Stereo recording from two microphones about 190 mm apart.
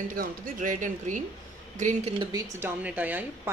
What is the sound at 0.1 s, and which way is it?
A woman's voice, 45° right (ahead or behind).